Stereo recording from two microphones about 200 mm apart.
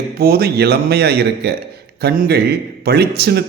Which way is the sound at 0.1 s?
50° right (ahead or behind).